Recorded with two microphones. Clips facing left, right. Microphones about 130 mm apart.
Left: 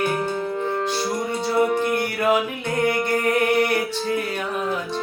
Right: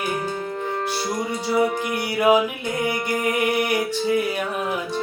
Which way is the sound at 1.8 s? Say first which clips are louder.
Even; 10° right (ahead or behind).